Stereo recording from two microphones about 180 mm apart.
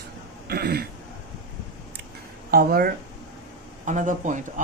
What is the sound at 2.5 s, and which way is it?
Speech, 55° right (ahead or behind).